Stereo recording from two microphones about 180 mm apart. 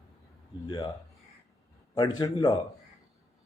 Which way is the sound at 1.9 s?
25° left (ahead or behind).